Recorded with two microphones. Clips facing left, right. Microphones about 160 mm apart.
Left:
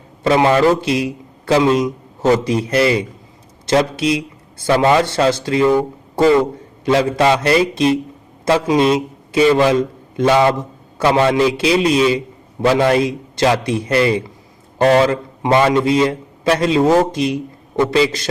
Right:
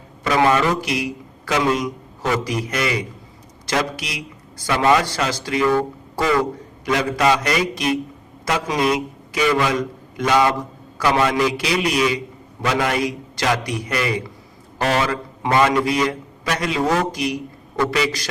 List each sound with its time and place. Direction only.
0.3 s a man's voice: 30° left (ahead or behind)
15.4 s a man's voice: 25° left (ahead or behind)